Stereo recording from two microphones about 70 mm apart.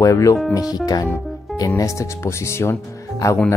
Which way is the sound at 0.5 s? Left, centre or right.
Left.